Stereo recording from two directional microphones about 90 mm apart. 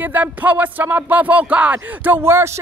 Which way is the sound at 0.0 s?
20° right (ahead or behind).